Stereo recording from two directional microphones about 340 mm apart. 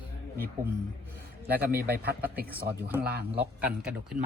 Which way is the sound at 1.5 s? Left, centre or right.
Right.